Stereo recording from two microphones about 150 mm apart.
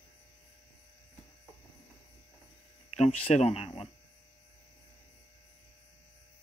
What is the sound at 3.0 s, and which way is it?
Speech, 50° left (ahead or behind).